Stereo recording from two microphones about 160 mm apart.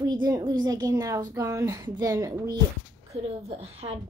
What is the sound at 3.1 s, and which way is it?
Speech, 40° right (ahead or behind).